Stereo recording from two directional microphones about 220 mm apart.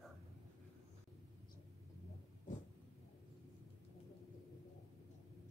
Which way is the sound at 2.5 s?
35° left (ahead or behind).